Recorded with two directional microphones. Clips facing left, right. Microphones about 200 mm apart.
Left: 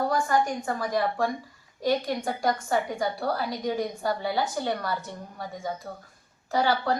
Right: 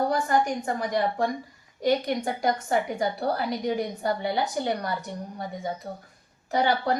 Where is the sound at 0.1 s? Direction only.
20° right (ahead or behind).